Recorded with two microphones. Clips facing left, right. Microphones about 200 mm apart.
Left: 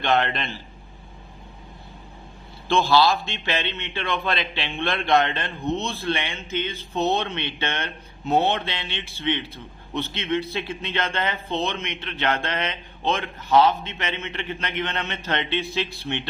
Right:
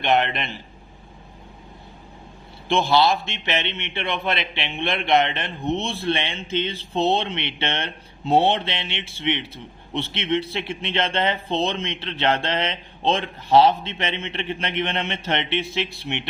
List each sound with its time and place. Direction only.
0.0 s a man's voice: 20° right (ahead or behind)
2.6 s a man's voice: 20° right (ahead or behind)